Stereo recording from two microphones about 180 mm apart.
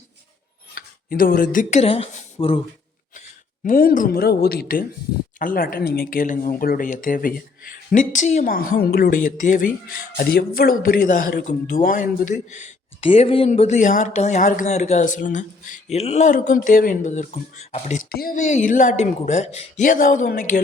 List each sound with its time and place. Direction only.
0.7 s speech: 50° left (ahead or behind); by 2.6 s 30° left (ahead or behind)
3.2 s speech: 50° left (ahead or behind)
8.5 s speech: 55° left (ahead or behind); by 18.0 s 35° left (ahead or behind)
18.1 s speech: 55° left (ahead or behind)
18.3 s speech: 40° left (ahead or behind)